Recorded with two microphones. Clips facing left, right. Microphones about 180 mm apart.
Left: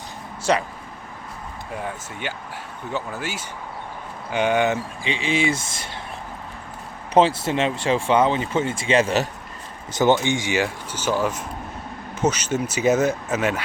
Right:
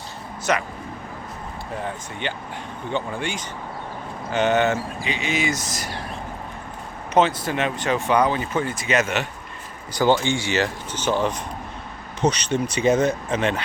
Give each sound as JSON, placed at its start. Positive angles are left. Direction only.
{"t": 0.5, "sound": "speech", "side_deg": 30}
{"t": 1.7, "sound": "speech", "side_deg": 10}
{"t": 5.0, "sound": "speech", "side_deg": 30}
{"t": 7.1, "sound": "speech", "side_deg": 30}
{"t": 9.9, "sound": "speech", "side_deg": 20}